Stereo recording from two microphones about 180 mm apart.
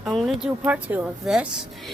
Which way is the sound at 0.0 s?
Centre (ahead or behind).